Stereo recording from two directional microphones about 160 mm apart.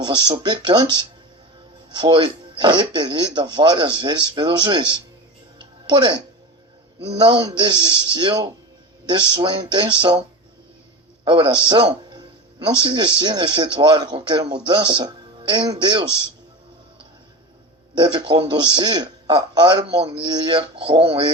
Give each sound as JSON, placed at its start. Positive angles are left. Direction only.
{"t": 0.0, "sound": "a man's voice", "side_deg": -25}
{"t": 1.9, "sound": "a man's voice", "side_deg": -30}
{"t": 5.5, "sound": "music", "side_deg": -30}
{"t": 7.1, "sound": "a man's voice", "side_deg": -30}
{"t": 11.3, "sound": "a man's voice", "side_deg": -30}
{"t": 17.9, "sound": "a man's voice", "side_deg": -30}